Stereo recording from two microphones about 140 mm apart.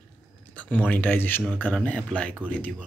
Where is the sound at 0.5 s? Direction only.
10° left (ahead or behind).